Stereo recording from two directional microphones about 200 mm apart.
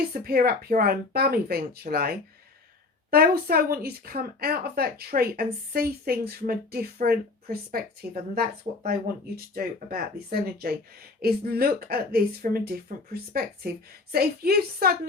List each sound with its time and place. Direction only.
0.1 s a woman's voice: 50° right (ahead or behind)
14.1 s a woman's voice: 50° right (ahead or behind)